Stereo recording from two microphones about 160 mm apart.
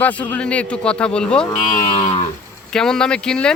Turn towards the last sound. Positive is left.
turn(degrees=5)  # may be behind; listen again after turning